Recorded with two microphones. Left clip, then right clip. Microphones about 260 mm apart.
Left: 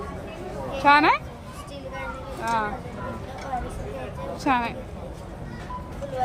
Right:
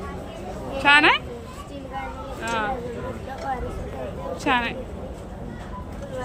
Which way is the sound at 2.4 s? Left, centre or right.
Left.